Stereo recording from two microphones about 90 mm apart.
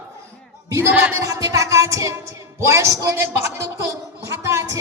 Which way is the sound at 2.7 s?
35° right (ahead or behind).